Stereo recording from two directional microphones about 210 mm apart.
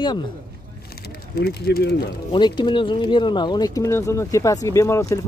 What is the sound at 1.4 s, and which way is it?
Speech, 50° left (ahead or behind).